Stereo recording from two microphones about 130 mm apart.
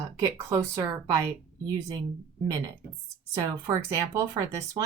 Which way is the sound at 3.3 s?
30° right (ahead or behind).